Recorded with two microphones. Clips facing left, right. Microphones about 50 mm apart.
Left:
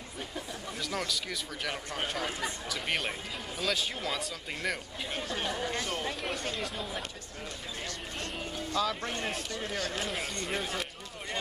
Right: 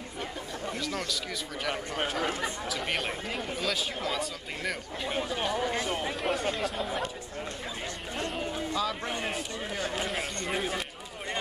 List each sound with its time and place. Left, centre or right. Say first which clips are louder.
0.7 s speech: left 1 dB; centre
2.2 s speech: right 4 dB; right
2.7 s speech: left 1 dB; centre
8.2 s speech: right 6 dB; centre
9.9 s speech: right 3 dB; centre
10.4 s a sound: right 3 dB; centre